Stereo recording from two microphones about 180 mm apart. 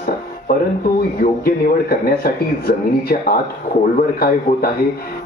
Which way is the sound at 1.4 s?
55° left (ahead or behind).